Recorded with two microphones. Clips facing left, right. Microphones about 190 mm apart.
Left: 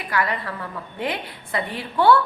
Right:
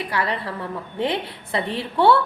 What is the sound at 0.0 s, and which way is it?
A woman's voice, 30° right (ahead or behind).